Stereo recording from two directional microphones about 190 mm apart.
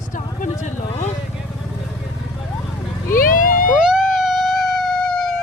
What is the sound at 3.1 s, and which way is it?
Speech, 45° left (ahead or behind).